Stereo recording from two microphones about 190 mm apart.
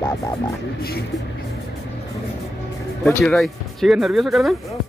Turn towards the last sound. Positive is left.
turn(degrees=0)  # may be behind; listen again after turning